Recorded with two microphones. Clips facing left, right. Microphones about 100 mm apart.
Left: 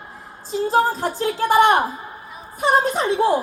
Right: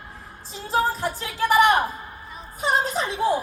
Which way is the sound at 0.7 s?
40° left (ahead or behind).